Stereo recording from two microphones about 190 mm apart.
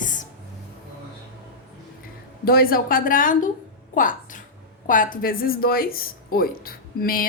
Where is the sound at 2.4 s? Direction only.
50° left (ahead or behind).